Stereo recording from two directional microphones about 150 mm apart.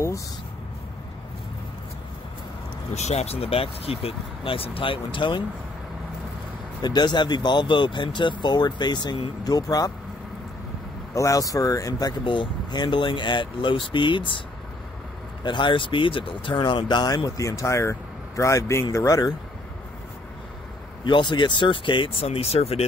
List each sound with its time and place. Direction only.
2.9 s speech: 50° left (ahead or behind)
6.8 s speech: 30° left (ahead or behind)
11.1 s speech: 20° left (ahead or behind)
15.4 s speech: 30° left (ahead or behind)
21.0 s speech: 30° left (ahead or behind)